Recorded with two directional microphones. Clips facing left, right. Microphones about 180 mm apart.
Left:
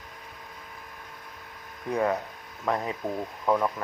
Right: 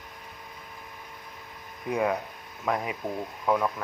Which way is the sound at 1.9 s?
10° right (ahead or behind).